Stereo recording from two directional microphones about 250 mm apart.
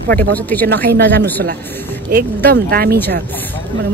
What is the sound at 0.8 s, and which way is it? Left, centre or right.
Speech, right.